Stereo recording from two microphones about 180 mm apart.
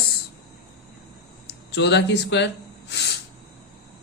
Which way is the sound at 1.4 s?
70° left (ahead or behind).